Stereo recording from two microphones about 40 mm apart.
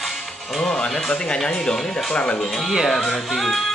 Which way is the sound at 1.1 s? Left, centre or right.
Left.